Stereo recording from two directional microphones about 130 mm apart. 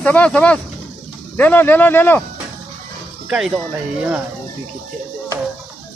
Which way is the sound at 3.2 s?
5° right (ahead or behind).